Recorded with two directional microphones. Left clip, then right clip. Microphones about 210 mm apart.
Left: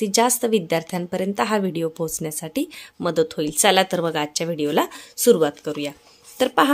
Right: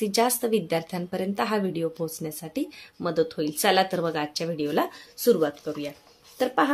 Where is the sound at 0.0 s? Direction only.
30° left (ahead or behind).